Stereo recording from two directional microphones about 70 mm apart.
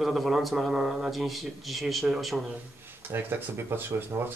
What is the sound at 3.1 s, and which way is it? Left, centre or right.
Speech, right.